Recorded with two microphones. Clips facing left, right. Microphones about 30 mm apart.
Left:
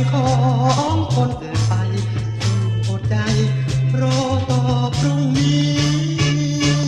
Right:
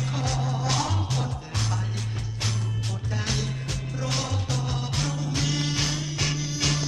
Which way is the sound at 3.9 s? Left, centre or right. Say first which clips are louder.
Left 10 dB; centre.